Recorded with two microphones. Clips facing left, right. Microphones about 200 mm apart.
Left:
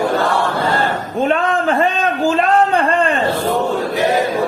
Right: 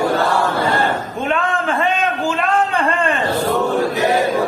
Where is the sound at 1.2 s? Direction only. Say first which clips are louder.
Left 4 dB; 40° left (ahead or behind).